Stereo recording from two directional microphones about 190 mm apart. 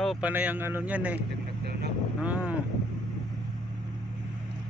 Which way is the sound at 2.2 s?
5° right (ahead or behind).